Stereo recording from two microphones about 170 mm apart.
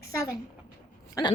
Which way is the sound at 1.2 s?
20° left (ahead or behind).